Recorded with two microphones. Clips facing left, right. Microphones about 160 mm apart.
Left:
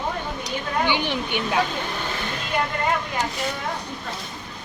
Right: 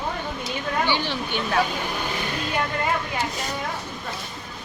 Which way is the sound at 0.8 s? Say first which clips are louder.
Left 1 dB; 15° left (ahead or behind).